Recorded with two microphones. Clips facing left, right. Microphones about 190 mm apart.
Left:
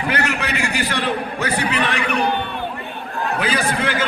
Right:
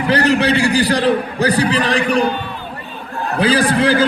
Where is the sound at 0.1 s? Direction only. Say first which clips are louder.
Right 11 dB; 35° right (ahead or behind).